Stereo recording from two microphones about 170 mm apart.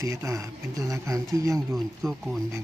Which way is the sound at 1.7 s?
Centre (ahead or behind).